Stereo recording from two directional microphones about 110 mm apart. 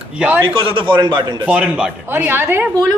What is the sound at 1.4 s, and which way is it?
A man's voice, 10° right (ahead or behind).